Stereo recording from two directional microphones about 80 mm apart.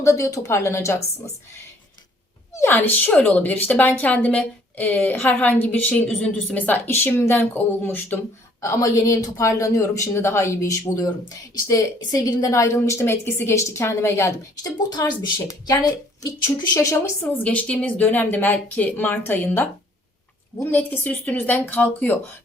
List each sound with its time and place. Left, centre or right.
0.0 s a woman's voice: left
2.6 s speech: left
8.6 s a woman's voice: left
14.8 s a woman's voice: left
16.7 s a woman's voice: left
17.2 s speech: centre
20.7 s speech: left